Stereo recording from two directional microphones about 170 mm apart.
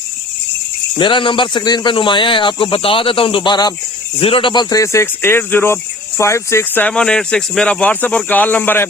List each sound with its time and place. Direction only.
0.9 s speech: 30° left (ahead or behind); by 8.9 s 10° left (ahead or behind)